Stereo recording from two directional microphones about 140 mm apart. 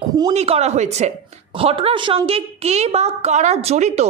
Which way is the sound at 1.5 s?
40° right (ahead or behind).